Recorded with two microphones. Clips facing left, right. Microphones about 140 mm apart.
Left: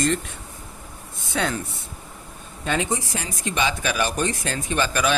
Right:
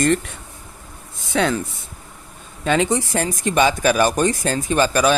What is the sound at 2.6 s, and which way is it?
Speech, 90° right.